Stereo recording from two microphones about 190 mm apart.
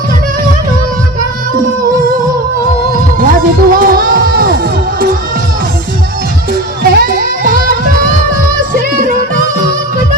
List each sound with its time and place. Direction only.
3.2 s music: 45° right (ahead or behind)
6.5 s music: 50° right (ahead or behind)